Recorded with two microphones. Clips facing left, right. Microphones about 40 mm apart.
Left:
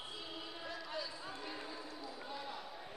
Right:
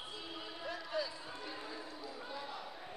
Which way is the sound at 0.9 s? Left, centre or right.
Centre.